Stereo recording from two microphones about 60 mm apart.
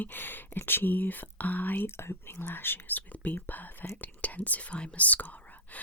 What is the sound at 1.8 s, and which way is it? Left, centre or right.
Speech, left.